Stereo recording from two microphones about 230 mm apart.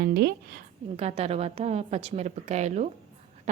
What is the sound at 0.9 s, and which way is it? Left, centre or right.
A woman's voice, right.